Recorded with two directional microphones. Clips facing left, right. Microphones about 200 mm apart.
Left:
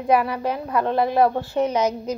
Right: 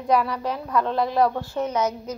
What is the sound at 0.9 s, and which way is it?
Speech, 55° left (ahead or behind).